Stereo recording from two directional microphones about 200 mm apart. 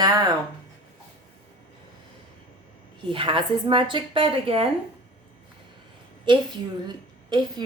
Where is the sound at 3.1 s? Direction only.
25° right (ahead or behind).